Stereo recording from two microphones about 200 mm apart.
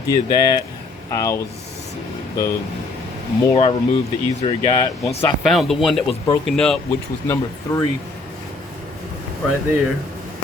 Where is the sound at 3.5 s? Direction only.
25° left (ahead or behind).